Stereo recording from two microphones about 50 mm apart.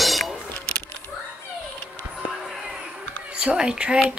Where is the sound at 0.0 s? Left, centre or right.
Centre.